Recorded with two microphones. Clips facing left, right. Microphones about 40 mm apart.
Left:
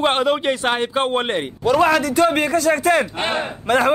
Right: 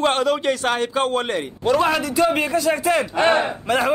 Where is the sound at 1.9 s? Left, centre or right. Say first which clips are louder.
Left 2 dB; left.